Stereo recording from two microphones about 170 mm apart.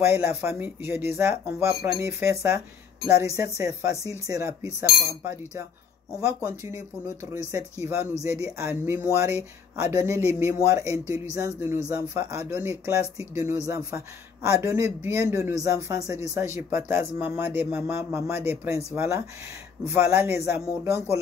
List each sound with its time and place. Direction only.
0.0 s speech: 15° right (ahead or behind)